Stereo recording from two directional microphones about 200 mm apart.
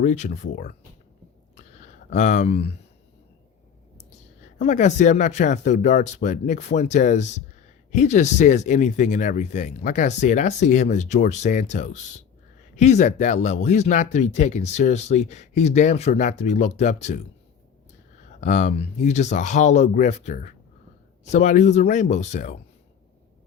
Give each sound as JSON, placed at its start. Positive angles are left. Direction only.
{"t": 0.0, "sound": "speech", "side_deg": 40}
{"t": 1.5, "sound": "a sound", "side_deg": 35}
{"t": 4.5, "sound": "speech", "side_deg": 35}
{"t": 18.3, "sound": "speech", "side_deg": 35}